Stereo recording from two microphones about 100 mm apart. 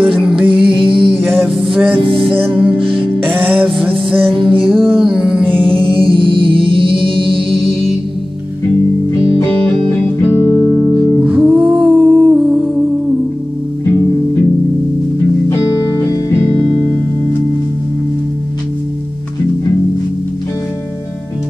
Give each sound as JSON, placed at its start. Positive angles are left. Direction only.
{"t": 0.2, "sound": "music", "side_deg": -10}
{"t": 0.5, "sound": "music", "side_deg": -60}
{"t": 1.2, "sound": "music", "side_deg": -20}
{"t": 1.7, "sound": "music", "side_deg": -5}
{"t": 2.8, "sound": "music", "side_deg": -60}
{"t": 3.3, "sound": "music", "side_deg": -15}
{"t": 4.3, "sound": "music", "side_deg": -60}
{"t": 4.8, "sound": "music", "side_deg": -10}
{"t": 5.7, "sound": "music", "side_deg": -60}
{"t": 10.1, "sound": "music", "side_deg": 30}
{"t": 11.2, "sound": "music", "side_deg": -10}
{"t": 12.5, "sound": "humming", "side_deg": -5}
{"t": 15.5, "sound": "music", "side_deg": 35}